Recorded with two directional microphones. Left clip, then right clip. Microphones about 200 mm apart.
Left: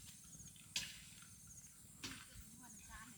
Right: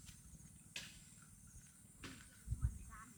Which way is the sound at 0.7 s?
50° left (ahead or behind).